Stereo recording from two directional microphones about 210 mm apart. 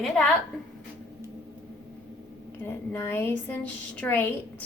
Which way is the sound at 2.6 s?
10° left (ahead or behind).